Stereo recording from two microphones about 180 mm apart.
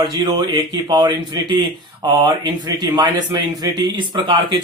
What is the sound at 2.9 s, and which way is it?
Speech, 20° right (ahead or behind).